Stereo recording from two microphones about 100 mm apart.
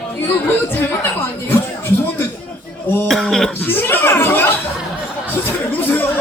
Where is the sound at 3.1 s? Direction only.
5° left (ahead or behind).